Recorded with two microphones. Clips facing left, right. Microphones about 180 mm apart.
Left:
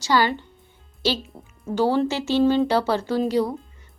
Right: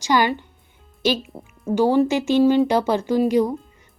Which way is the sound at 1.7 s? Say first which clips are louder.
Right 4 dB; 15° right (ahead or behind).